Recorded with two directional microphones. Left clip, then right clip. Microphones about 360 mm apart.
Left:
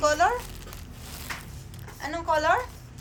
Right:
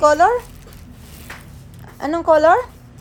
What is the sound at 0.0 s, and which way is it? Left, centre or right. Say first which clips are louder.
Speech: right 10 dB; centre.